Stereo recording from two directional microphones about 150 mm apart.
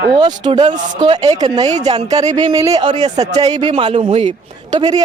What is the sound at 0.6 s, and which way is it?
A man's voice, 45° right (ahead or behind).